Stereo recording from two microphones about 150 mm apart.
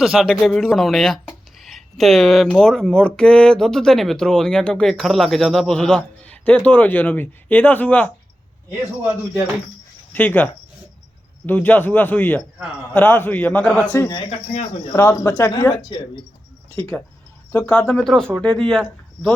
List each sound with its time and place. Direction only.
0.0 s speech: centre (ahead or behind)
10.1 s speech: 10° left (ahead or behind)
14.3 s speech: 45° left (ahead or behind)
14.9 s speech: 20° left (ahead or behind)
15.7 s speech: 30° left (ahead or behind)
16.7 s speech: 10° left (ahead or behind)